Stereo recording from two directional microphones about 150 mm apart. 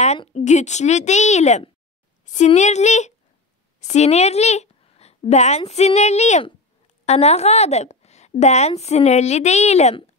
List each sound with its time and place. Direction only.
0.3 s a woman's voice: 50° left (ahead or behind)